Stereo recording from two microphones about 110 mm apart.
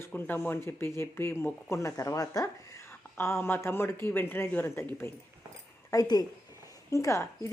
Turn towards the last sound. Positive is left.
turn(degrees=30)  # may be behind; listen again after turning